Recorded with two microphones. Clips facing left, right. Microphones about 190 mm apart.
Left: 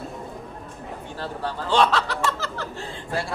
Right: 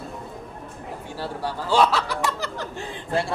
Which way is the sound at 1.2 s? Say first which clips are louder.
Right 1 dB; 10° right (ahead or behind).